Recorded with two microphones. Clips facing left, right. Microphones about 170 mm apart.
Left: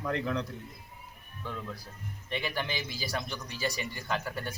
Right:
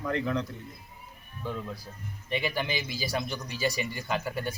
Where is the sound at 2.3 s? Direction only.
10° right (ahead or behind).